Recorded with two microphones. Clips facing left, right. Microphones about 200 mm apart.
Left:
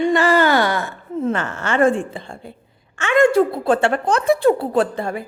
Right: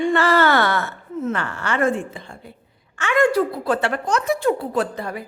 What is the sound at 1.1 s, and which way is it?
A woman's voice, 25° left (ahead or behind).